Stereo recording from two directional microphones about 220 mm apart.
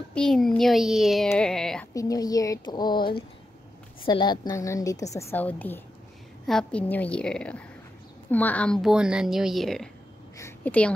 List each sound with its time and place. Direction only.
0.1 s a child's voice: centre (ahead or behind)
2.0 s a woman's voice: 15° left (ahead or behind)